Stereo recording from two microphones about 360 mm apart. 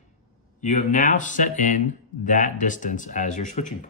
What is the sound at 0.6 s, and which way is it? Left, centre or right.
Speech, left.